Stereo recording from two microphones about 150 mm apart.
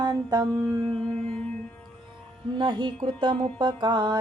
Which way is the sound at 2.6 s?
30° right (ahead or behind).